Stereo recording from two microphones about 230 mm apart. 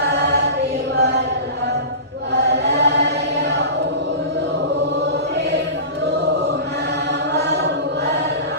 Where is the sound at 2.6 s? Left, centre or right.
Right.